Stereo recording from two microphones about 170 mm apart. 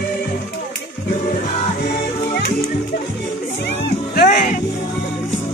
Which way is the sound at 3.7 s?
90° left.